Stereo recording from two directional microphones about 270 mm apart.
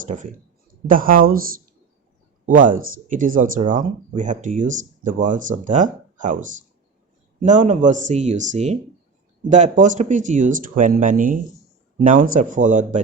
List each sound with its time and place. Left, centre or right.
0.0 s speech: right
2.5 s speech: right